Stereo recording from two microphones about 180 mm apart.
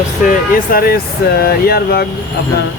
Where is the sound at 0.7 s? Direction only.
55° left (ahead or behind).